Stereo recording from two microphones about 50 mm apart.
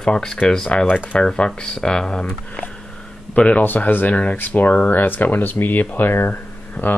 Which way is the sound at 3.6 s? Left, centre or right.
Left.